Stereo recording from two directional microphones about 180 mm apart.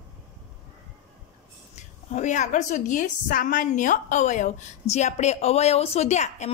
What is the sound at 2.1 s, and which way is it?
A woman's voice, 40° left (ahead or behind).